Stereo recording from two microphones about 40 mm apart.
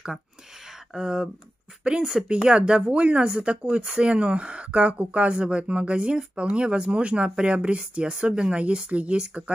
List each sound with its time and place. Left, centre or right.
0.9 s speech: centre